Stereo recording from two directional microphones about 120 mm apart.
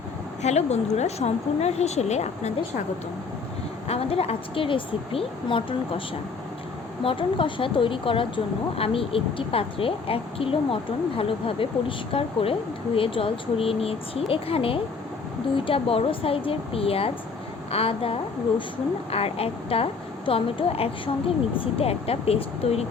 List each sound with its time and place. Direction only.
0.4 s a woman's voice: 65° left (ahead or behind)
3.8 s speech: 55° left (ahead or behind)
7.0 s speech: 50° left (ahead or behind)